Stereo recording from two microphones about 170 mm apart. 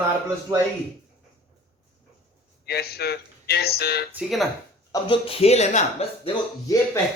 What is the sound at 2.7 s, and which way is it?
Speech, 70° left (ahead or behind).